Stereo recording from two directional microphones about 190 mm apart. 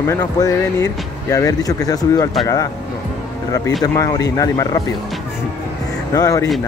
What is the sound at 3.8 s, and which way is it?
Speech, 15° left (ahead or behind).